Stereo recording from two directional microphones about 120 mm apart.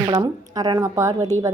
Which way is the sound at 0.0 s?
35° right (ahead or behind).